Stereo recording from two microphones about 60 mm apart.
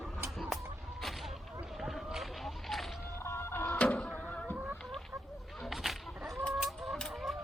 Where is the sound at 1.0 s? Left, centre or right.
Centre.